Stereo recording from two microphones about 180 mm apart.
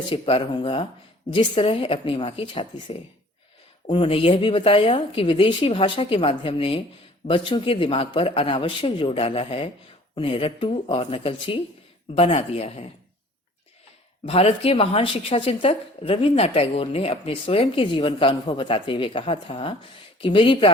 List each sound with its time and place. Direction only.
0.1 s a woman's voice: 30° left (ahead or behind)
14.3 s a woman's voice: 35° left (ahead or behind)